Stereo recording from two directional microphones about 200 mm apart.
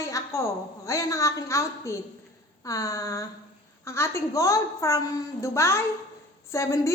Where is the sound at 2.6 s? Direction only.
15° left (ahead or behind).